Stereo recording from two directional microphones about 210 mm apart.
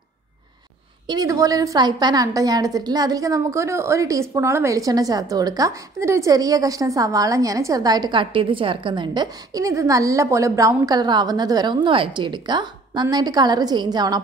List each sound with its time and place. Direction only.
1.0 s a woman's voice: 20° right (ahead or behind)